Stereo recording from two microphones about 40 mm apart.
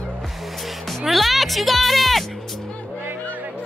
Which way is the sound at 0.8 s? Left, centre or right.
Centre.